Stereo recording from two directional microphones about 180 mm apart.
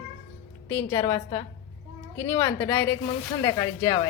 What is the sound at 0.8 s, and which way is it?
A woman's voice, 20° left (ahead or behind).